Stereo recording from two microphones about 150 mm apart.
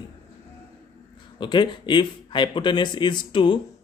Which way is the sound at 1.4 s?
30° left (ahead or behind).